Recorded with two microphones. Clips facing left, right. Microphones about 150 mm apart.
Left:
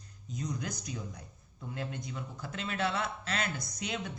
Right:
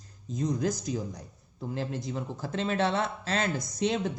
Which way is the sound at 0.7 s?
90° right.